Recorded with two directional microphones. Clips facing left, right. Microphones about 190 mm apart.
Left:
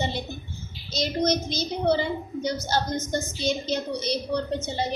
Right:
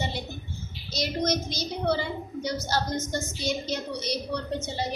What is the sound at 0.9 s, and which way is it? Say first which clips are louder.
A woman's voice: left 3 dB; 25° left (ahead or behind).